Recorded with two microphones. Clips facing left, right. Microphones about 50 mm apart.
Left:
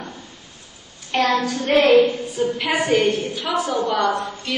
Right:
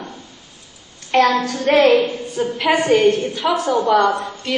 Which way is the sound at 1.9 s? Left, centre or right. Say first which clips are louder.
Left 1 dB; right.